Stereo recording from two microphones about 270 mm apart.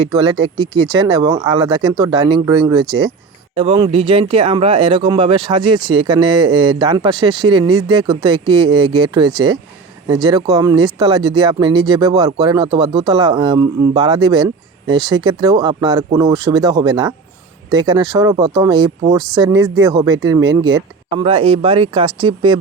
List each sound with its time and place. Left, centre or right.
0.1 s speech: centre